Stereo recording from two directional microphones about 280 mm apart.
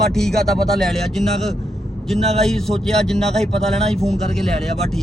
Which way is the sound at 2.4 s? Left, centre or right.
Centre.